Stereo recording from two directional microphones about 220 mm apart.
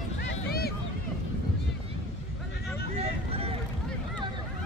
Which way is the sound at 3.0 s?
25° right (ahead or behind).